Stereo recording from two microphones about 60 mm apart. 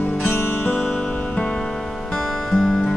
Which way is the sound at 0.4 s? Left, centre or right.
Left.